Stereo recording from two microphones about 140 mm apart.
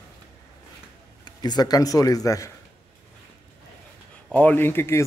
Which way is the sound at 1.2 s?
30° left (ahead or behind).